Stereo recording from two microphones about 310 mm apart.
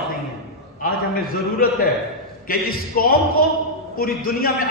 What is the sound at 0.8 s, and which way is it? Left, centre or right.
A man's voice, left.